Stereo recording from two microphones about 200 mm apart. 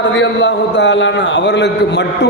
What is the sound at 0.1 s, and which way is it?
A man's voice, 65° left (ahead or behind).